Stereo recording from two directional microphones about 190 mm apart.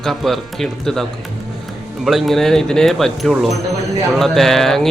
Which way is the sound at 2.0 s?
Centre (ahead or behind).